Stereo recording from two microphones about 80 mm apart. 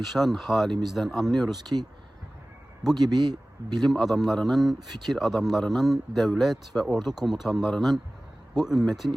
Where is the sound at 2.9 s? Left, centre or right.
Right.